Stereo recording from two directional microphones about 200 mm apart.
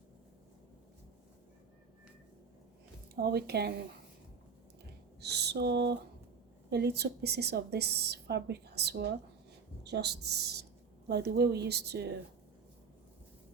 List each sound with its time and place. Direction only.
3.2 s a woman's voice: 50° right (ahead or behind)
5.2 s a woman's voice: 55° right (ahead or behind)